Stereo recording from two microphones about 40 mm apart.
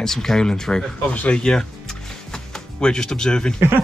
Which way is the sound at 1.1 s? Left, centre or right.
Left.